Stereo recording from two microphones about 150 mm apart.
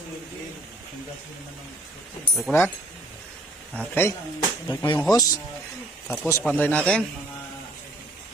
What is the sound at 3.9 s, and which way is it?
Speech, 15° left (ahead or behind).